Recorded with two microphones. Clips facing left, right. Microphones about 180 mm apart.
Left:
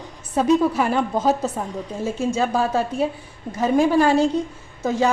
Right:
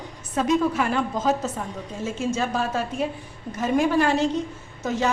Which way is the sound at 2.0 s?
35° left (ahead or behind).